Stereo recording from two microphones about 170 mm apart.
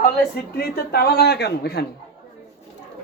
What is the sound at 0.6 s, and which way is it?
A man's voice, 65° left (ahead or behind).